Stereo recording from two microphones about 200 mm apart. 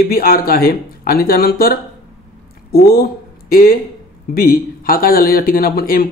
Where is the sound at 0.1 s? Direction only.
45° left (ahead or behind).